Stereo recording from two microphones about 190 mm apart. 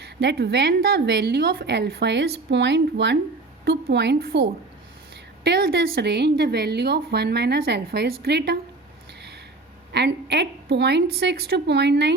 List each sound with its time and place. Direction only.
0.0 s a woman's voice: 60° right (ahead or behind)
9.9 s a woman's voice: 60° right (ahead or behind)